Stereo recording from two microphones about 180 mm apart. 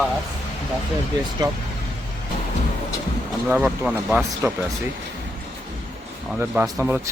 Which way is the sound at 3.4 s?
5° right (ahead or behind).